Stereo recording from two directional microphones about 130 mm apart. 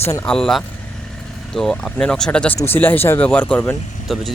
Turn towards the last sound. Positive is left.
turn(degrees=5)  # may be behind; listen again after turning